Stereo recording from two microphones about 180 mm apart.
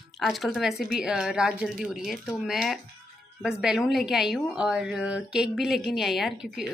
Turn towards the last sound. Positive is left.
turn(degrees=0)  # may be behind; listen again after turning